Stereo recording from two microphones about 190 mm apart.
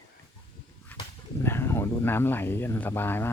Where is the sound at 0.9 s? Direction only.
5° left (ahead or behind).